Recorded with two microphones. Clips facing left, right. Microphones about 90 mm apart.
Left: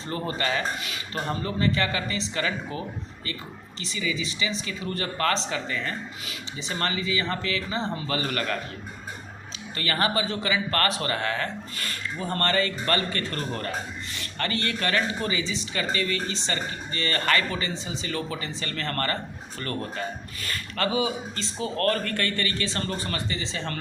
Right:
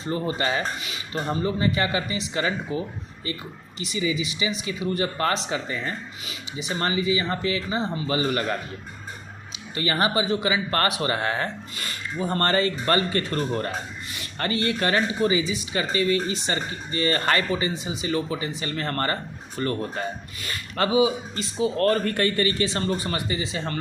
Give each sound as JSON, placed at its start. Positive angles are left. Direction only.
{"t": 0.1, "sound": "speech", "side_deg": -20}
{"t": 0.8, "sound": "a man's voice", "side_deg": -5}
{"t": 6.2, "sound": "a man's voice", "side_deg": -10}
{"t": 9.7, "sound": "speech", "side_deg": -20}
{"t": 11.8, "sound": "a sound", "side_deg": -15}
{"t": 12.4, "sound": "a man's voice", "side_deg": -30}